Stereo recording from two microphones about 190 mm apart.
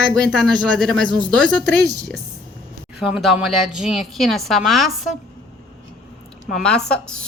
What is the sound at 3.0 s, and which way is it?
A woman's voice, centre (ahead or behind).